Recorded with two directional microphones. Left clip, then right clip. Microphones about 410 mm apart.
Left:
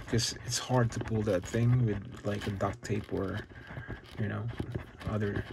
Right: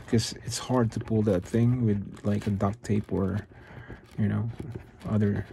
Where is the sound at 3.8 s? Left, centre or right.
Centre.